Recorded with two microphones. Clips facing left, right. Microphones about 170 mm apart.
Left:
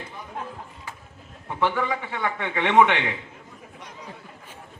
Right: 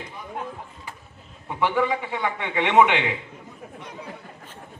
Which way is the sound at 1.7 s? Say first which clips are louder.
Right 4 dB; 15° right (ahead or behind).